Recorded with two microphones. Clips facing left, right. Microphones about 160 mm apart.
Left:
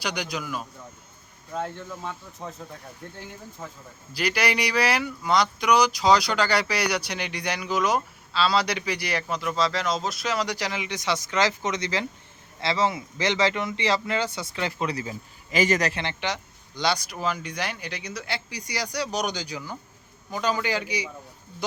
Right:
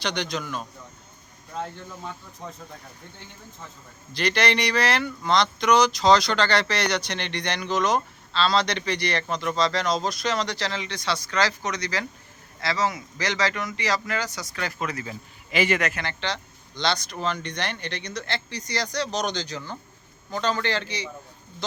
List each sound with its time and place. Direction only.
0.0 s speech: 10° left (ahead or behind)
4.1 s speech: 10° left (ahead or behind); by 15.1 s 30° left (ahead or behind)
15.5 s speech: 40° left (ahead or behind); by 21.1 s 10° left (ahead or behind)